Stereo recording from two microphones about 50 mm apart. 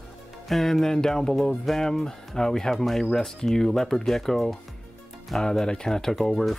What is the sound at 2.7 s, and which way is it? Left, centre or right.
Speech, centre.